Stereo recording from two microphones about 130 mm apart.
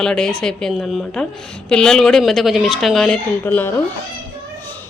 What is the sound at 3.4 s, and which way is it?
Speech, 15° left (ahead or behind).